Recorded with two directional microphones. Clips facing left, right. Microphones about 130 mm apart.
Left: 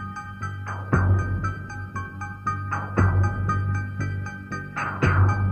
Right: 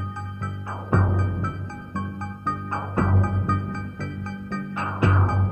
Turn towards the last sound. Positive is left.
turn(degrees=-15)  # may be behind; listen again after turning